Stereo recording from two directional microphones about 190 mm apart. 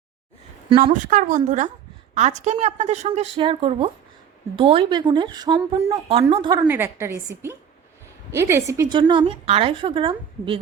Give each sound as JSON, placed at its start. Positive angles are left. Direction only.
{"t": 1.0, "sound": "a woman's voice", "side_deg": -40}
{"t": 8.3, "sound": "a woman's voice", "side_deg": -15}